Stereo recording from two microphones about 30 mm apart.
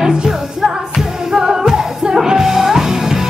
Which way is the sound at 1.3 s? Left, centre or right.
Centre.